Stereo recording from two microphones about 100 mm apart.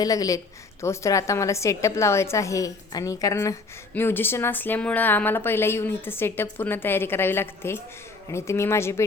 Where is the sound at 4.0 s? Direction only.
20° left (ahead or behind).